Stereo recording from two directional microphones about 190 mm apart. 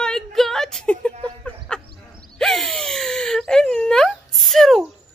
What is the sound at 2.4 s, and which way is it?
Wail, centre (ahead or behind).